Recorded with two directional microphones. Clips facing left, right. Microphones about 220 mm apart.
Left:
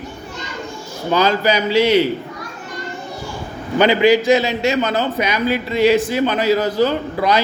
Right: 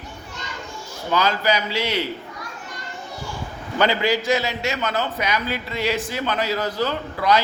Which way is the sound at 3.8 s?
20° left (ahead or behind).